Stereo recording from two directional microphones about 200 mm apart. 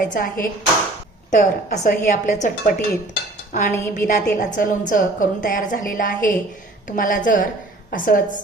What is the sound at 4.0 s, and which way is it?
A woman's voice, 40° left (ahead or behind).